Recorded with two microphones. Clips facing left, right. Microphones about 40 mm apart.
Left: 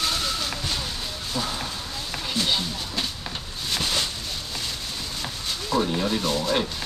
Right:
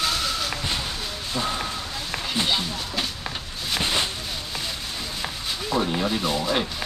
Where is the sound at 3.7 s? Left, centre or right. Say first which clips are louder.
Right 2 dB; right.